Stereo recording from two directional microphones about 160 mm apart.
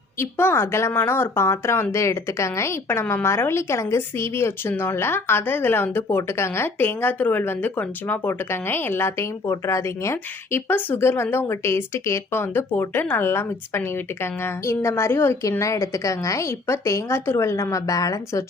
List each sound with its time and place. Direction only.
0.2 s speech: 15° left (ahead or behind)